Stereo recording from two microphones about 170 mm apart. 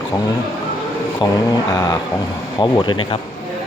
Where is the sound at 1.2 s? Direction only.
25° left (ahead or behind).